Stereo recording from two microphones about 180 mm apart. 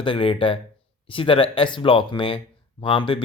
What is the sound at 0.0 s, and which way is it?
Speech, 30° left (ahead or behind).